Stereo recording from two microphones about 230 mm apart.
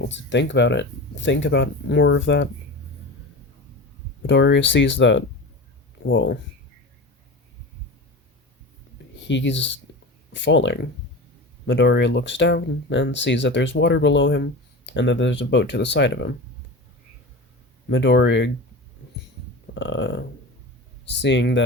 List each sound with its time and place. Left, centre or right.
0.0 s speech: left
4.3 s speech: left
9.2 s speech: left
17.8 s speech: left
19.7 s speech: left